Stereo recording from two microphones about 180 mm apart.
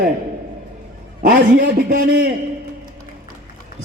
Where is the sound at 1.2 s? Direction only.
50° right (ahead or behind).